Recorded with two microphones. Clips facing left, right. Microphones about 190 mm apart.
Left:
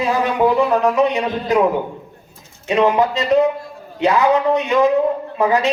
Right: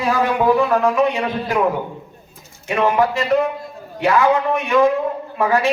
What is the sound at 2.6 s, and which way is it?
Speech, 20° left (ahead or behind).